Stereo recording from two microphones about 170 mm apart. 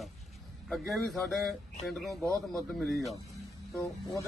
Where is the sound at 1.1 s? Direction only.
Centre (ahead or behind).